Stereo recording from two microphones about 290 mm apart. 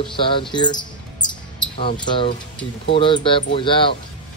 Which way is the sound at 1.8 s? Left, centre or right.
Centre.